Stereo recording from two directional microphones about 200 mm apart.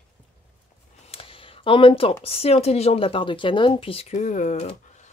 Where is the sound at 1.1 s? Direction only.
30° left (ahead or behind).